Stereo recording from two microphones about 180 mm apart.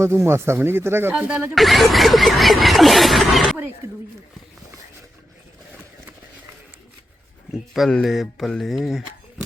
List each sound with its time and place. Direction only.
0.0 s speech: 15° right (ahead or behind)
1.5 s snicker: centre (ahead or behind)
3.8 s speech: 15° right (ahead or behind)
7.7 s snicker: 5° left (ahead or behind)